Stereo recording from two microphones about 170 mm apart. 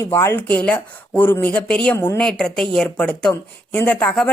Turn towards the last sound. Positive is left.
turn(degrees=5)  # may be behind; listen again after turning